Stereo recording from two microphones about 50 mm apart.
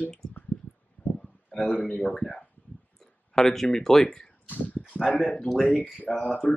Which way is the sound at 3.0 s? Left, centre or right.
Centre.